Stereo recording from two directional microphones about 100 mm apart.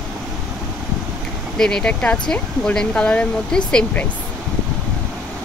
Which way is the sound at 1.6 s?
10° left (ahead or behind).